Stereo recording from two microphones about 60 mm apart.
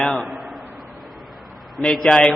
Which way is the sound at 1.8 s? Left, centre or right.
Centre.